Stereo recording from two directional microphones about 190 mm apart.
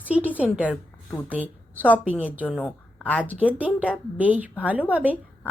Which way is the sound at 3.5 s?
10° right (ahead or behind).